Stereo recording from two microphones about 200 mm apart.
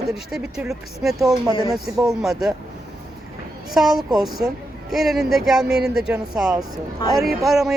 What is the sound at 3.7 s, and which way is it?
Speech, centre (ahead or behind).